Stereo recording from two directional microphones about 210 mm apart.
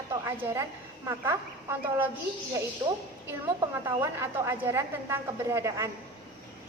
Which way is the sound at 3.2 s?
15° right (ahead or behind).